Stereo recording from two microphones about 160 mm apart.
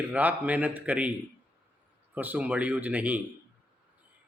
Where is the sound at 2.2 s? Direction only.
10° right (ahead or behind).